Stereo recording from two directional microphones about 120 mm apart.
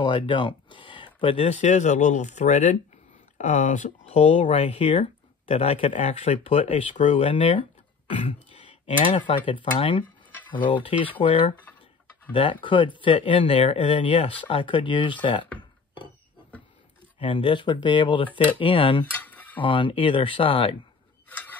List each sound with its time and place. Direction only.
0.0 s speech: 45° left (ahead or behind)
1.5 s speech: 75° left (ahead or behind)
3.3 s speech: 75° left (ahead or behind); by 6.8 s 55° left (ahead or behind)
7.0 s speech: 75° left (ahead or behind)
7.2 s speech: 45° left (ahead or behind)
9.0 s speech: 45° left (ahead or behind)
17.2 s speech: 45° left (ahead or behind)
19.1 s a sound: 15° left (ahead or behind)
19.6 s speech: 45° left (ahead or behind)
21.3 s a sound: 15° left (ahead or behind)